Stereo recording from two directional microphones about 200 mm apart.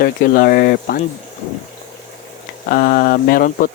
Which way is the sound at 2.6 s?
45° left (ahead or behind).